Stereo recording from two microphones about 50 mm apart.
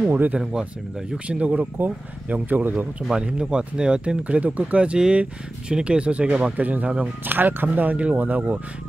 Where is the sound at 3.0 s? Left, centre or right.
Centre.